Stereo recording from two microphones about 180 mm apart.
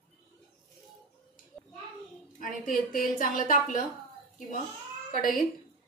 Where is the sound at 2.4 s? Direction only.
50° left (ahead or behind).